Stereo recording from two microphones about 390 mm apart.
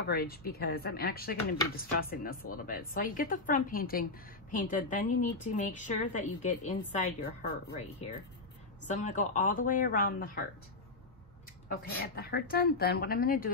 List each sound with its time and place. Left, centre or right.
0.1 s a woman's voice: left
11.7 s speech: left